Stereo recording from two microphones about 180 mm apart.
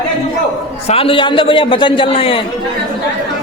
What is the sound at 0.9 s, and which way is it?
A man's voice, 30° left (ahead or behind).